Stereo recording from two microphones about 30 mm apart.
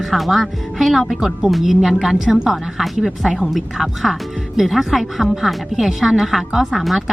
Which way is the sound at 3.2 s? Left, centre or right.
Centre.